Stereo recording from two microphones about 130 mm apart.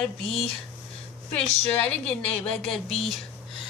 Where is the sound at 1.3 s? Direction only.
10° left (ahead or behind).